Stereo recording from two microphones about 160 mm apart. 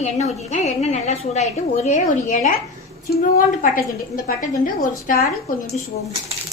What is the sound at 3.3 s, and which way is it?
A woman's voice, 65° left (ahead or behind).